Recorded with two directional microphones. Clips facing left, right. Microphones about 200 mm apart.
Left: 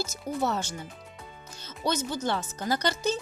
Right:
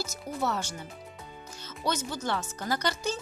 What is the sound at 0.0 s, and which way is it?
Speech, 20° left (ahead or behind).